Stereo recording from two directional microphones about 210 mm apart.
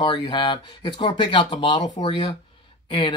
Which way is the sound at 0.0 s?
20° left (ahead or behind).